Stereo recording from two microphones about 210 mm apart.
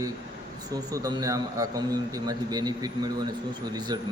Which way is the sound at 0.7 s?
15° right (ahead or behind).